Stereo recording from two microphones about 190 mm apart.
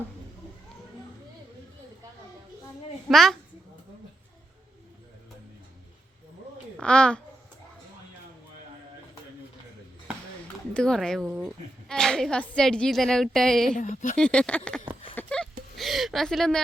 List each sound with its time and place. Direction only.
3.1 s a woman's voice: centre (ahead or behind)
6.7 s a woman's voice: 5° left (ahead or behind)
10.8 s a woman's voice: 5° left (ahead or behind)
11.3 s speech: 10° right (ahead or behind)
11.9 s a woman's voice: 5° left (ahead or behind)
13.7 s a woman's voice: 45° left (ahead or behind)
14.2 s a woman's voice: 5° left (ahead or behind)
15.1 s a sound: 5° left (ahead or behind)